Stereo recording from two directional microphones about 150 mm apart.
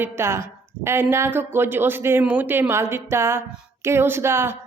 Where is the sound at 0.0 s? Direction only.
15° right (ahead or behind).